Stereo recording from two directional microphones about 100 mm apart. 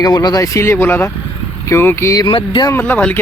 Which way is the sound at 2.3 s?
60° left (ahead or behind).